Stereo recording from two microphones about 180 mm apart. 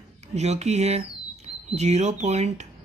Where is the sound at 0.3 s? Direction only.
40° right (ahead or behind).